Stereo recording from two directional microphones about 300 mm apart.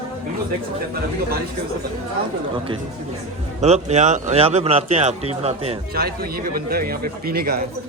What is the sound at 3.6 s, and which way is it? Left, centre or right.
Speech, right.